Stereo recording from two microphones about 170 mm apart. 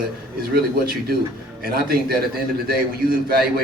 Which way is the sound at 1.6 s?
60° right (ahead or behind).